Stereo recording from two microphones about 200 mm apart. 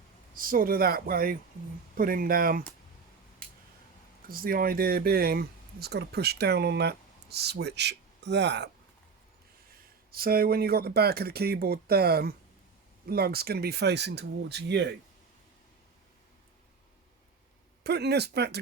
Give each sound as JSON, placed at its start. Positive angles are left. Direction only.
{"t": 0.3, "sound": "speech", "side_deg": -45}
{"t": 3.4, "sound": "a sound", "side_deg": 5}
{"t": 4.3, "sound": "speech", "side_deg": -45}
{"t": 10.1, "sound": "speech", "side_deg": -50}
{"t": 17.8, "sound": "speech", "side_deg": -55}